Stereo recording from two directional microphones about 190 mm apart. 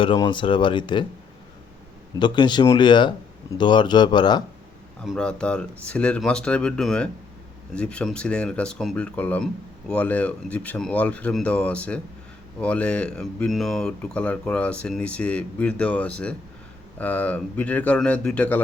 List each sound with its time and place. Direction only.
0.0 s speech: 25° left (ahead or behind)
2.1 s speech: 25° left (ahead or behind)
5.0 s speech: 5° left (ahead or behind)